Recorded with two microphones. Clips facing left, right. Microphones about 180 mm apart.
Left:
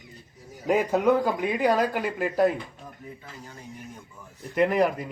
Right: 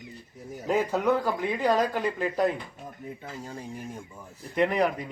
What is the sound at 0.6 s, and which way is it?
A man's voice, 15° left (ahead or behind).